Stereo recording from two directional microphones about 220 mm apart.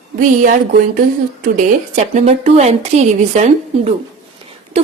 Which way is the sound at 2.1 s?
30° right (ahead or behind).